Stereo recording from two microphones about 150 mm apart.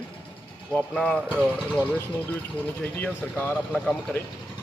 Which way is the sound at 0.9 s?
5° left (ahead or behind).